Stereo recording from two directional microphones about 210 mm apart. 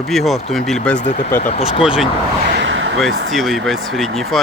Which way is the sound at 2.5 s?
60° right (ahead or behind).